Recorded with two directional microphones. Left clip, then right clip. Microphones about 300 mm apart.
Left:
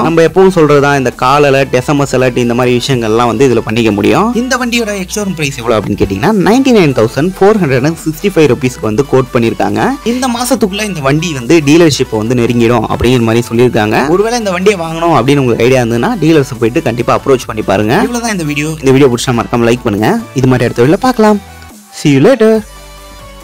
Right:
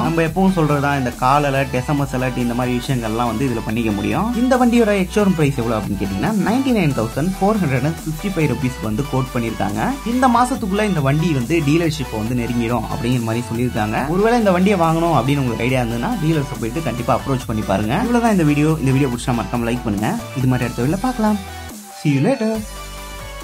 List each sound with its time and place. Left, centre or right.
0.0 s speech: left
4.8 s speech: centre
5.7 s speech: left